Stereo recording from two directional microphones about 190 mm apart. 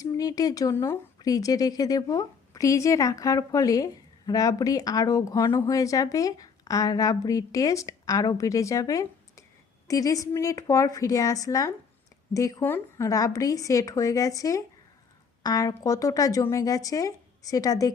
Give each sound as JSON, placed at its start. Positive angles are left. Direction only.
{"t": 0.0, "sound": "speech", "side_deg": 20}